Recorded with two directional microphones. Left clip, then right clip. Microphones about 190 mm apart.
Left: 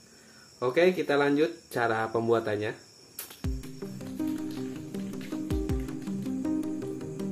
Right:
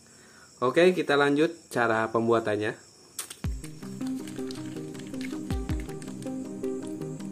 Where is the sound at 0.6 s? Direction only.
40° right (ahead or behind).